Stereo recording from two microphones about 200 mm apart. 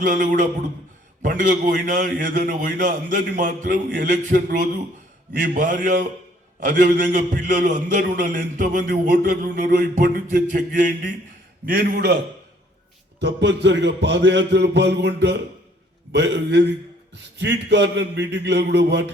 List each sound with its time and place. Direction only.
0.0 s a man's voice: 45° right (ahead or behind)
9.1 s a man's voice: 55° right (ahead or behind)
13.1 s a man's voice: 60° right (ahead or behind)